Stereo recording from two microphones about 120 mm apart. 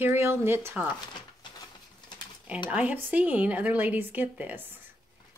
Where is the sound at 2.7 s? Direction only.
15° right (ahead or behind).